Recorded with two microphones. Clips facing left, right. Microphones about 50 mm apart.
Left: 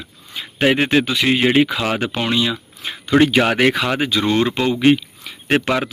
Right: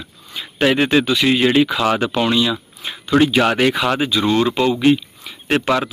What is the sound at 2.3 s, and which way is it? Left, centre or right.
Speech, left.